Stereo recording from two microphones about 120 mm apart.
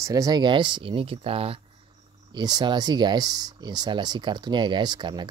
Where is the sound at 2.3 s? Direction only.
35° right (ahead or behind).